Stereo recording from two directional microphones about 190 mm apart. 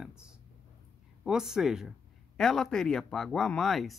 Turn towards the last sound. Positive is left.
turn(degrees=0)  # may be behind; listen again after turning